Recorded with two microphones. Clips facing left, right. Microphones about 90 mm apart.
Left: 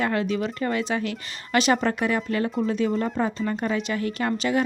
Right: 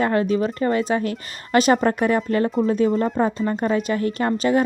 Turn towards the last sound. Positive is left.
turn(degrees=-40)  # may be behind; listen again after turning